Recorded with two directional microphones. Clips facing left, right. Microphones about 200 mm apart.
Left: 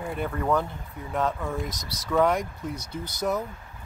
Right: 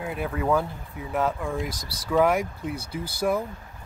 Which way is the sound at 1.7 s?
30° right (ahead or behind).